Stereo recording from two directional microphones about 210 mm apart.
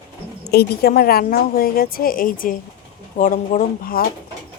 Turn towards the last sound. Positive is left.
turn(degrees=45)  # may be behind; listen again after turning